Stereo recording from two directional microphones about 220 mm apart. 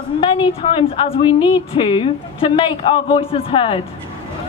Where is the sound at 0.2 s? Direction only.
25° left (ahead or behind).